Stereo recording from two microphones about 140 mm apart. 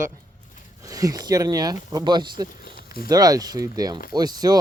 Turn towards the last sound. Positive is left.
turn(degrees=-30)  # may be behind; listen again after turning